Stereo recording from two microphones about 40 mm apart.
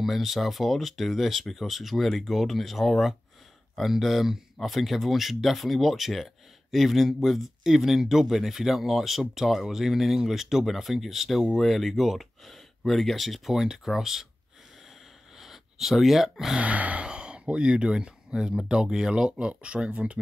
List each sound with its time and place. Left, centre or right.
0.0 s speech: centre
15.3 s a sound: centre
16.5 s gasp: right
17.0 s speech: right